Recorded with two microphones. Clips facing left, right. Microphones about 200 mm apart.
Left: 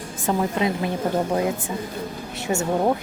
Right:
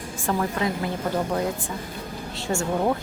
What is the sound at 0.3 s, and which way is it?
A woman's voice, 20° left (ahead or behind).